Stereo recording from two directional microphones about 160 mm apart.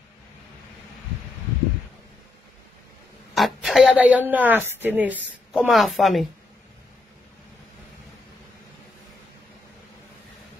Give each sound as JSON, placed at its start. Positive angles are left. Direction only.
{"t": 3.3, "sound": "a woman's voice", "side_deg": 0}